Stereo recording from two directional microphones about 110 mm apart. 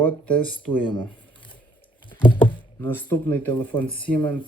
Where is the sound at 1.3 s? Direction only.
50° left (ahead or behind).